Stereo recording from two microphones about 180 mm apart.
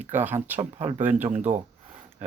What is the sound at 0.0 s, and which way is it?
Speech, 10° right (ahead or behind).